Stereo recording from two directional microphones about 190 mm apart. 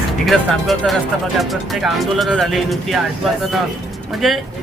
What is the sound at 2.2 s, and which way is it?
Speech, centre (ahead or behind).